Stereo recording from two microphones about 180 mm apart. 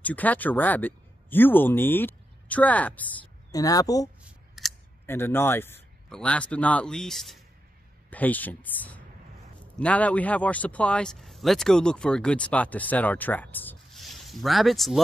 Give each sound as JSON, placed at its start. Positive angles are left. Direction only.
{"t": 0.0, "sound": "speech", "side_deg": 10}
{"t": 3.5, "sound": "speech", "side_deg": 20}
{"t": 4.2, "sound": "scissors", "side_deg": 0}
{"t": 5.0, "sound": "a man's voice", "side_deg": 15}